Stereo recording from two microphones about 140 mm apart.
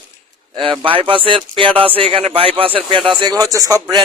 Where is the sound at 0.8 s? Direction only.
40° right (ahead or behind).